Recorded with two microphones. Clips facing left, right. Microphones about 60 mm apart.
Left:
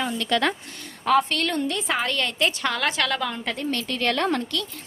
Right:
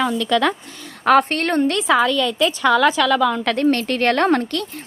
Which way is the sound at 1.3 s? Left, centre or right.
Right.